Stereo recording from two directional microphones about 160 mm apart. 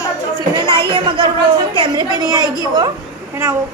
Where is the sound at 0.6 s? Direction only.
30° right (ahead or behind).